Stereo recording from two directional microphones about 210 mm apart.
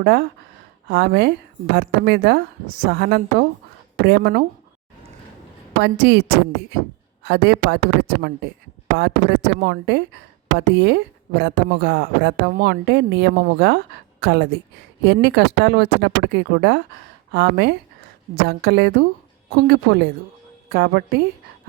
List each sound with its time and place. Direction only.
0.0 s speech: 45° right (ahead or behind)
5.8 s speech: 55° right (ahead or behind)
7.3 s speech: 50° right (ahead or behind)